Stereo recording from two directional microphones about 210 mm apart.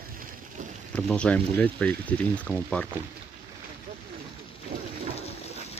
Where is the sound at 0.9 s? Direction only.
5° left (ahead or behind).